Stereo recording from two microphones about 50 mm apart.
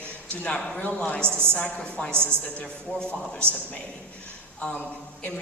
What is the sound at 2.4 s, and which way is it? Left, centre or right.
Speech, left.